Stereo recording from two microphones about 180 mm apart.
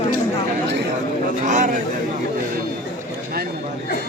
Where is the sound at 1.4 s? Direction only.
45° right (ahead or behind).